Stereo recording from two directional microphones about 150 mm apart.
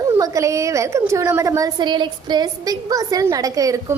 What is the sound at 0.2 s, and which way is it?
A woman's voice, 20° right (ahead or behind).